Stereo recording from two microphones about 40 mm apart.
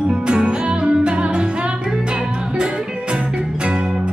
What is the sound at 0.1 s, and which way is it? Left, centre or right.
Music, right.